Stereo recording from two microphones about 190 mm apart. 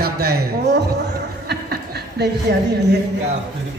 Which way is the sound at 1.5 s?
60° right (ahead or behind).